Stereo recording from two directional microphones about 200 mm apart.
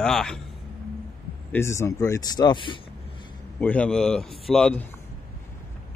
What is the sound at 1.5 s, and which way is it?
Speech, 15° left (ahead or behind).